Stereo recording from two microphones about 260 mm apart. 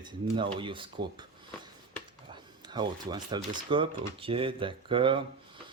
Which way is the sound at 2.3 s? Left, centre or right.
Centre.